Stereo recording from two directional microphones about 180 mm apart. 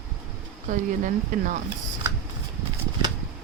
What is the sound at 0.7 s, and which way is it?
Speech, 45° right (ahead or behind).